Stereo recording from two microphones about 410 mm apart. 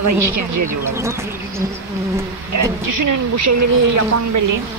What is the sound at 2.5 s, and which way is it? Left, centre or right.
Speech, right.